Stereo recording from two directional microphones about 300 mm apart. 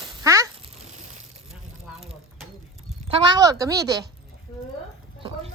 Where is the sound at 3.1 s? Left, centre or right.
Centre.